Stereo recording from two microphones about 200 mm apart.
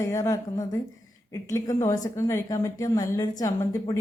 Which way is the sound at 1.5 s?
15° left (ahead or behind).